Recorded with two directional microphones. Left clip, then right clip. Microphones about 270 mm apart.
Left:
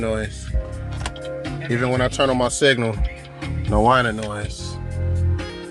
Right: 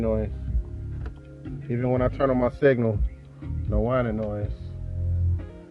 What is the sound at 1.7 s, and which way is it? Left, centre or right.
Speech, centre.